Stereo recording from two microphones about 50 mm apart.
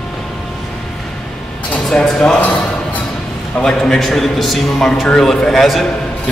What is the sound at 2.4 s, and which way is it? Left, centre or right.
Music, left.